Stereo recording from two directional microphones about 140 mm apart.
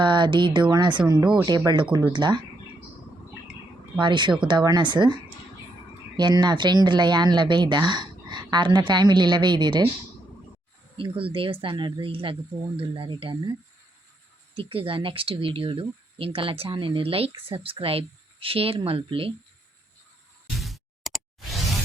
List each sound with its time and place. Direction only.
0.0 s speech: 35° right (ahead or behind)
3.9 s speech: 35° right (ahead or behind)
10.9 s speech: 40° right (ahead or behind)
20.6 s a sound: centre (ahead or behind)